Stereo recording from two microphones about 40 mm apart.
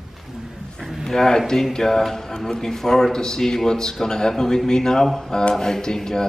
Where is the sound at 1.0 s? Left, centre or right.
Centre.